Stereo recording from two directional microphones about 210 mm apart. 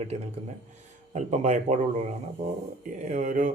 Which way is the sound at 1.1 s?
35° right (ahead or behind).